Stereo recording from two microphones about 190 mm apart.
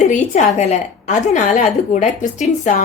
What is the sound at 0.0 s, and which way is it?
Speech, 40° left (ahead or behind).